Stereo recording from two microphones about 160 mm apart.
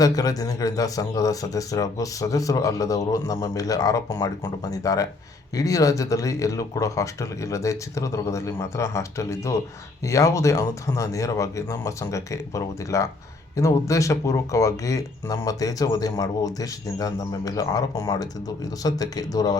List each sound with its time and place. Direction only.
0.0 s a man's voice: 25° left (ahead or behind)